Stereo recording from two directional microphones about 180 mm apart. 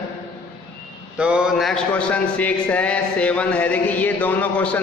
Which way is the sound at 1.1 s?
5° right (ahead or behind).